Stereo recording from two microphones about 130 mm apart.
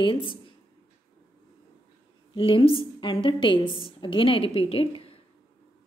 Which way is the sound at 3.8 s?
40° left (ahead or behind).